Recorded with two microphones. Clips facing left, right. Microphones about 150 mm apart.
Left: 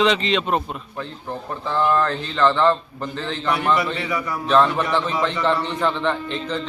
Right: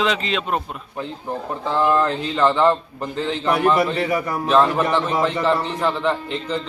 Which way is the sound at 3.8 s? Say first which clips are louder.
Right 4 dB; 50° right (ahead or behind).